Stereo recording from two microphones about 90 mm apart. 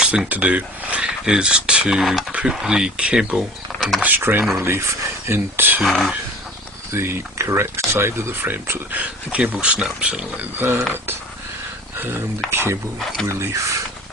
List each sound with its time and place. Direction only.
0.0 s speech: 10° right (ahead or behind)
4.0 s speech: 20° right (ahead or behind)
5.8 s speech: 5° left (ahead or behind)
6.9 s speech: 30° right (ahead or behind)